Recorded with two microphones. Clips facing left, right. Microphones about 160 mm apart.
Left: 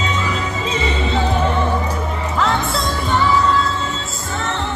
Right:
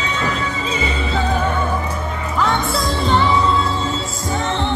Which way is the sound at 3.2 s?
30° right (ahead or behind).